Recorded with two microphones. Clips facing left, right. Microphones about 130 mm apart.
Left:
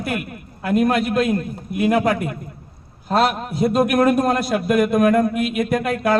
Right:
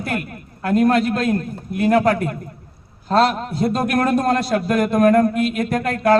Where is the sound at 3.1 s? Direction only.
10° left (ahead or behind).